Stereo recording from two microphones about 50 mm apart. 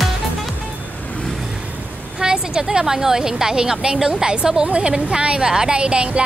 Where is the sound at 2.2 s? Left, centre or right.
Centre.